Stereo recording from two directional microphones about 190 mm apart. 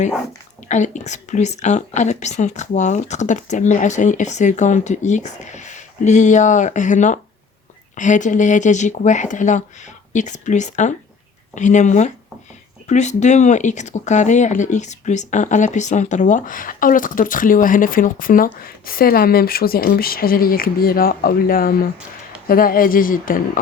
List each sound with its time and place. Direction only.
0.7 s speech: 40° left (ahead or behind)